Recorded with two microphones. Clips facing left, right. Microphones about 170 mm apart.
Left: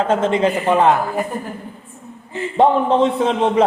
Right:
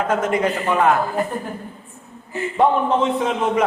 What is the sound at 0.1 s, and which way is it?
Speech, 25° left (ahead or behind).